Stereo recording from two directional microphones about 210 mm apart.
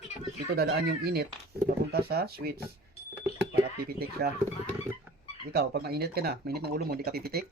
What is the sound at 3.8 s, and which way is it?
Speech, 45° right (ahead or behind).